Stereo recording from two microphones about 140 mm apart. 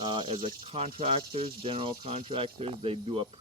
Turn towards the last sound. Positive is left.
turn(degrees=-40)  # may be behind; listen again after turning